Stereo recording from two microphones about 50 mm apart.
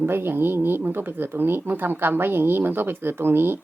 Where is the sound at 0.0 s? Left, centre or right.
Right.